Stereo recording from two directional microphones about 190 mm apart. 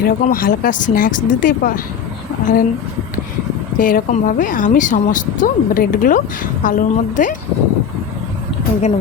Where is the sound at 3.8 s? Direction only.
45° left (ahead or behind).